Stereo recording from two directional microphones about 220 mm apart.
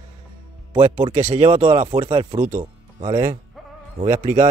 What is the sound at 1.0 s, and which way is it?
Speech, 25° right (ahead or behind).